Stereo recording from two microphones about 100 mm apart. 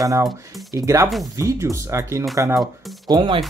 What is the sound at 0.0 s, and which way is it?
Speech, 35° right (ahead or behind).